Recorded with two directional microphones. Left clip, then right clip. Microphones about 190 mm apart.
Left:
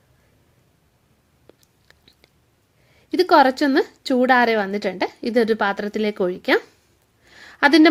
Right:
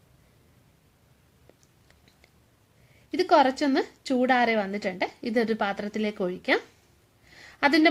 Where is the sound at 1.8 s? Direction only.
25° left (ahead or behind).